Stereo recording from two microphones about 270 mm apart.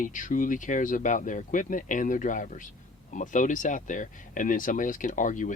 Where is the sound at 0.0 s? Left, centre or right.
Left.